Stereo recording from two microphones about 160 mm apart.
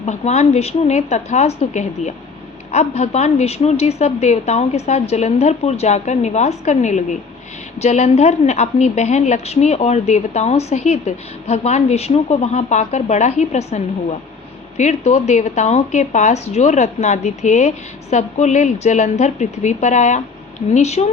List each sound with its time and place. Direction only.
0.0 s a woman's voice: 45° left (ahead or behind)